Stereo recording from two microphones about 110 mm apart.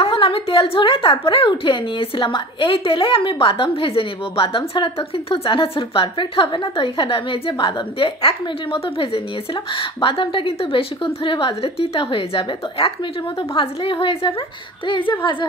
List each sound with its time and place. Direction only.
0.0 s a woman's voice: 60° left (ahead or behind)